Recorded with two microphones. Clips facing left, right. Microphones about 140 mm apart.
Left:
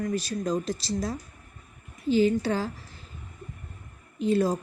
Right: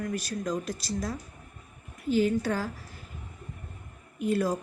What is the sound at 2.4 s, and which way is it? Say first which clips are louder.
Speech: left 2 dB; 30° left (ahead or behind).